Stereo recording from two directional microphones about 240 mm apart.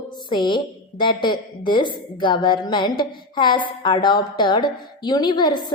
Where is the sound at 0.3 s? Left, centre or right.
Centre.